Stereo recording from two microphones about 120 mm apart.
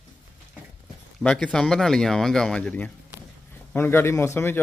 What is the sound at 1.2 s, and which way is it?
A man's voice, 10° left (ahead or behind).